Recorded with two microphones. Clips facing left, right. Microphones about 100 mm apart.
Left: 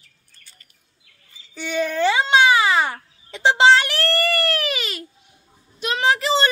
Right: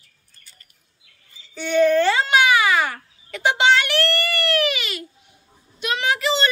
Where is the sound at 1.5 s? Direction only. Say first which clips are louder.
Right 7 dB; 5° left (ahead or behind).